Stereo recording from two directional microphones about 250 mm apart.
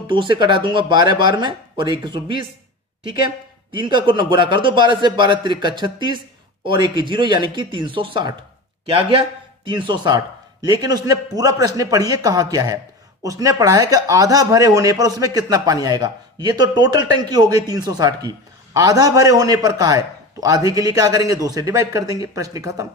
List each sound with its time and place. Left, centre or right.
0.1 s a man's voice: centre
3.7 s a man's voice: centre